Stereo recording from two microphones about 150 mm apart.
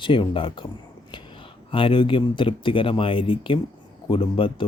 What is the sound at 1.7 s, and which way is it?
Speech, 35° left (ahead or behind).